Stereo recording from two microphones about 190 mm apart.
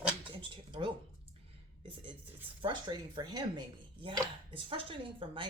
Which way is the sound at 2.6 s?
25° right (ahead or behind).